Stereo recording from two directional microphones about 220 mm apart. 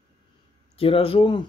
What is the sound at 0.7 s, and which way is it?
Speech, 25° left (ahead or behind).